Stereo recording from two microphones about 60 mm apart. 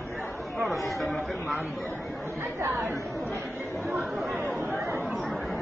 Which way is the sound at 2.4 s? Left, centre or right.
Right.